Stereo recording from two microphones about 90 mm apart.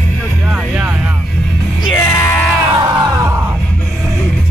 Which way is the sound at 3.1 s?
35° right (ahead or behind).